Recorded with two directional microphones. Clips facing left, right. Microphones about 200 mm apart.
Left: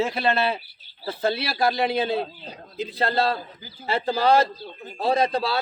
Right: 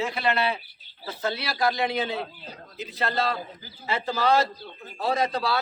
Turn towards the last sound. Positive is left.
turn(degrees=30)  # may be behind; listen again after turning